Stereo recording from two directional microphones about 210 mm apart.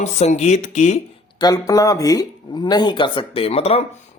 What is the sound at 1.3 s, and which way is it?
Speech, 20° left (ahead or behind).